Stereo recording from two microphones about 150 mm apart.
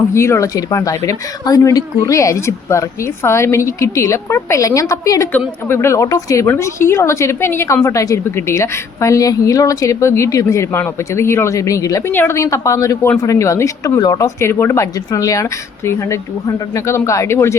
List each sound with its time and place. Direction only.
0.1 s a woman's voice: 20° left (ahead or behind)